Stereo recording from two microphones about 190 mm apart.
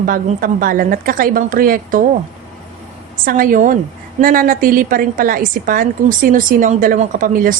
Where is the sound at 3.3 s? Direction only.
45° right (ahead or behind).